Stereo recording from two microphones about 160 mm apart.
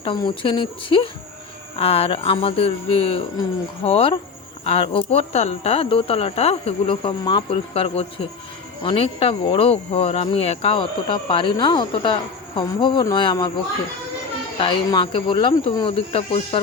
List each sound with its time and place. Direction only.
0.0 s speech: 30° left (ahead or behind)
14.6 s speech: 30° left (ahead or behind)